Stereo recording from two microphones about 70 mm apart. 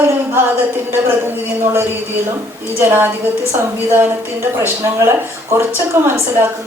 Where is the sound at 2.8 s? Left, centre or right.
Right.